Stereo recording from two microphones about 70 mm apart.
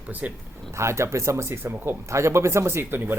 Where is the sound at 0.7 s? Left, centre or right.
Right.